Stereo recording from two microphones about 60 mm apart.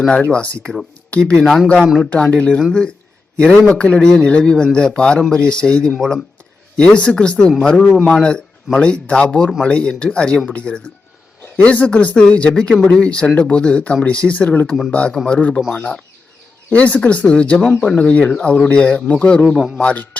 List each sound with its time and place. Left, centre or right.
0.1 s speech: centre
6.7 s speech: centre
16.6 s speech: left